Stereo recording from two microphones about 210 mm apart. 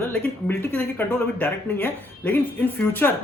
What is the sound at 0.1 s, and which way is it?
Speech, 10° left (ahead or behind).